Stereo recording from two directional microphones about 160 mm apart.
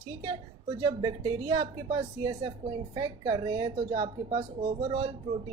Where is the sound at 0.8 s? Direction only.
25° right (ahead or behind).